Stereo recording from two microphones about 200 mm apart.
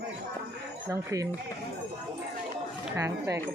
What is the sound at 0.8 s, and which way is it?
Speech, 15° right (ahead or behind).